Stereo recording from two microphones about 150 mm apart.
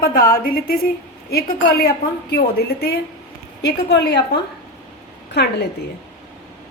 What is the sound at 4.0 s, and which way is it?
A woman's voice, 90° left.